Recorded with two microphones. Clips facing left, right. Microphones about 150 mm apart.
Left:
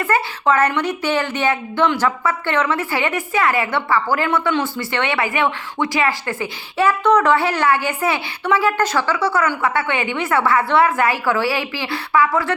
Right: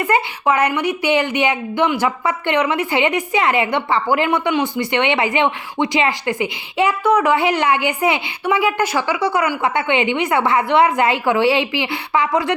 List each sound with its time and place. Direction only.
0.0 s a woman's voice: 15° right (ahead or behind)